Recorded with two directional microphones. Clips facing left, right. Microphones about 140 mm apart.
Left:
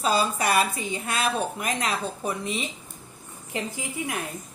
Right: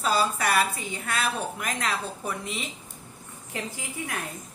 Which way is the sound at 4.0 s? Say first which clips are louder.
Left 3 dB; 15° left (ahead or behind).